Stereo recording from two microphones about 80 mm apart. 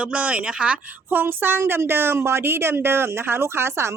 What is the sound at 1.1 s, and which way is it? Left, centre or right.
Speech, right.